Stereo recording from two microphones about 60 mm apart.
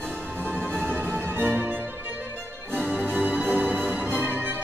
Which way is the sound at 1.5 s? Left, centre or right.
Right.